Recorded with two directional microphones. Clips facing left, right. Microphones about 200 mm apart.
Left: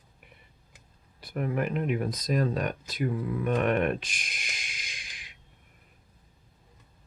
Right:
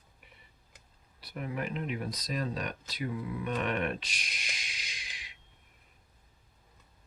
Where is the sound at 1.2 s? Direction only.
50° left (ahead or behind).